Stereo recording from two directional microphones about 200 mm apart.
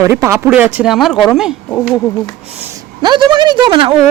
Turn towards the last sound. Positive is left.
turn(degrees=-25)  # may be behind; listen again after turning